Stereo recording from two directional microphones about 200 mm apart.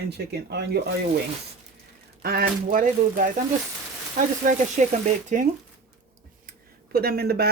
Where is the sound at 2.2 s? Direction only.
45° right (ahead or behind).